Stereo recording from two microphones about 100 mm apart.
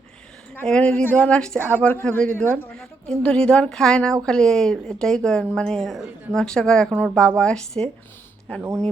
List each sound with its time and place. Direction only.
0.5 s speech: 15° left (ahead or behind)
2.7 s speech: 10° left (ahead or behind)